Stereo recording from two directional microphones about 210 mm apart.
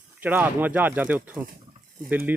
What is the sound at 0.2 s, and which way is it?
Speech, 10° right (ahead or behind).